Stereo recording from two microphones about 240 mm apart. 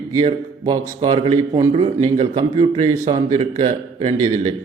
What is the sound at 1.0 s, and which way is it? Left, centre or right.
A man's voice, right.